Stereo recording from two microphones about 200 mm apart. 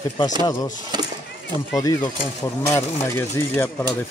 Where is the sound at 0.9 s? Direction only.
20° right (ahead or behind).